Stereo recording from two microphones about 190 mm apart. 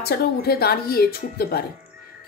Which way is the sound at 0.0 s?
55° left (ahead or behind).